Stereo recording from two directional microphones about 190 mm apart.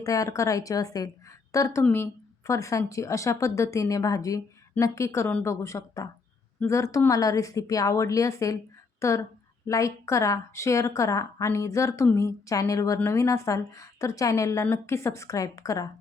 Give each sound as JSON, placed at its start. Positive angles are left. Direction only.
{"t": 0.0, "sound": "a woman's voice", "side_deg": 15}